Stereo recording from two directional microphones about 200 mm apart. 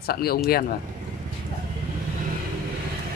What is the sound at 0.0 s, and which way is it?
Speech, 50° left (ahead or behind).